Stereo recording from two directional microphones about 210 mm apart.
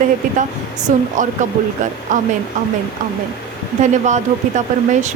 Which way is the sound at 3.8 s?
35° right (ahead or behind).